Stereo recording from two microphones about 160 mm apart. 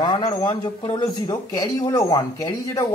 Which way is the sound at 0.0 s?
25° left (ahead or behind).